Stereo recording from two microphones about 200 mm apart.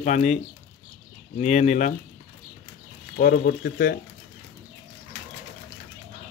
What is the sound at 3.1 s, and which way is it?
Speech, 50° left (ahead or behind).